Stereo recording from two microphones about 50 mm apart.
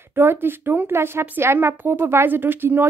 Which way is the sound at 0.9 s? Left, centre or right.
Right.